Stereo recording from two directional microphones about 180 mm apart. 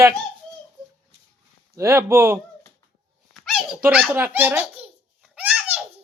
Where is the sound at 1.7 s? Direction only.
15° right (ahead or behind).